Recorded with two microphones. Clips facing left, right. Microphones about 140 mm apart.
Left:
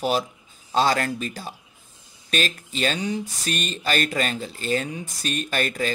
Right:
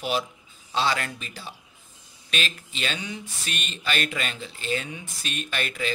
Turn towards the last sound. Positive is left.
turn(degrees=40)  # may be behind; listen again after turning